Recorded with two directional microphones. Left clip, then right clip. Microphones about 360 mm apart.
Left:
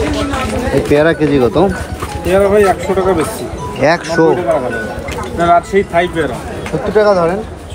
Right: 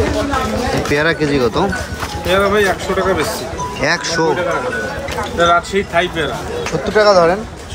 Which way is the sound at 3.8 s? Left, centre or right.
Centre.